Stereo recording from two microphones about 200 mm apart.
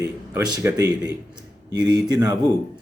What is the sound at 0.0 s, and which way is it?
Speech, 20° right (ahead or behind).